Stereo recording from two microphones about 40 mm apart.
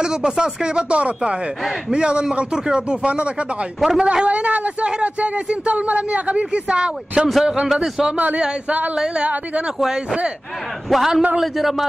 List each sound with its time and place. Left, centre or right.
0.0 s speech: centre
3.8 s a man's voice: centre
4.1 s a man's voice: right; by 8.1 s centre
8.6 s speech: right
8.9 s a man's voice: centre
10.9 s a man's voice: centre